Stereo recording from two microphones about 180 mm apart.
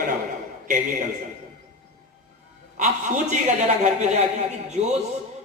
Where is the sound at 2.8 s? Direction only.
45° right (ahead or behind).